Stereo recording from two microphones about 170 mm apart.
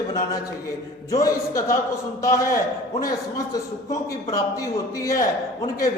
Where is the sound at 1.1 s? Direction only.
20° left (ahead or behind).